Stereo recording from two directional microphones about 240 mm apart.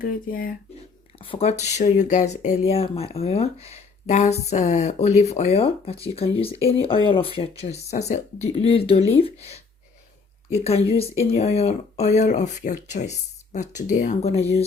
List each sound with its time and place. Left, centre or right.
0.0 s speech: left
1.2 s speech: left